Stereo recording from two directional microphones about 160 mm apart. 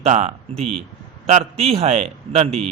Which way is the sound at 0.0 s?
40° right (ahead or behind).